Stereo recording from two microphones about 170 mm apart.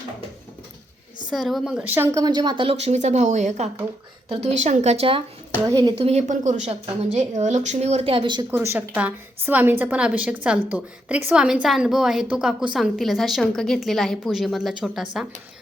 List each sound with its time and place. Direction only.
1.3 s a woman's voice: centre (ahead or behind); by 5.2 s 35° right (ahead or behind)
5.6 s a woman's voice: 20° right (ahead or behind)
6.0 s speech: 40° right (ahead or behind)
8.4 s a woman's voice: 15° right (ahead or behind)